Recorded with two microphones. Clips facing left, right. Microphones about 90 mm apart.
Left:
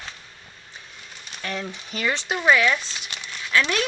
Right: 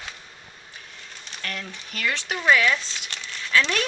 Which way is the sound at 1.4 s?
20° left (ahead or behind).